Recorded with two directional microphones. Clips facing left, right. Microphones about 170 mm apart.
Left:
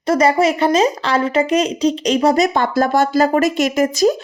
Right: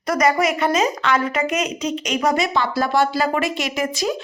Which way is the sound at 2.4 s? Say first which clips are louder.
Left 5 dB; 50° left (ahead or behind).